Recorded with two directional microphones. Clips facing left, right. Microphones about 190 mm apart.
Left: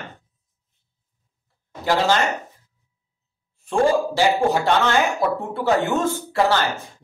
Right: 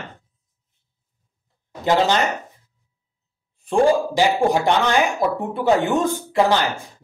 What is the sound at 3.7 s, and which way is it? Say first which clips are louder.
Speech: right 2 dB; 15° right (ahead or behind).